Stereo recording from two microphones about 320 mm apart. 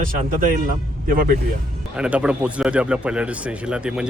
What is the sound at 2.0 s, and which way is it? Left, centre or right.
Speech, centre.